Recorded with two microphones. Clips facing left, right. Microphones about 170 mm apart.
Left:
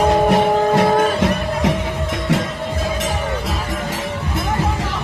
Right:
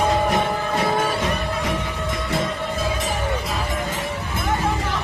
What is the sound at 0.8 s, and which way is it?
Music, 75° left (ahead or behind).